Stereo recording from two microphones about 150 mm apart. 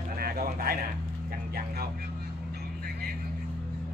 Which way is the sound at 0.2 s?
85° right.